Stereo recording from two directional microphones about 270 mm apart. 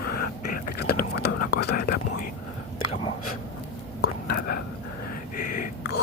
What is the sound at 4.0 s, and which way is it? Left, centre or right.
Whispering, left.